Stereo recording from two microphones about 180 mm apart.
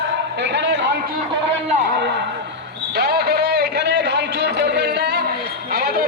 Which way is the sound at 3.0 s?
65° right (ahead or behind).